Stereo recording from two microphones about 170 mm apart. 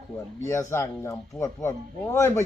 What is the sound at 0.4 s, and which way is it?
Speech, 15° left (ahead or behind).